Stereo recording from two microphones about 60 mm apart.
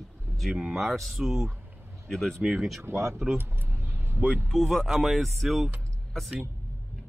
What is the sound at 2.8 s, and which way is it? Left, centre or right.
Speech, right.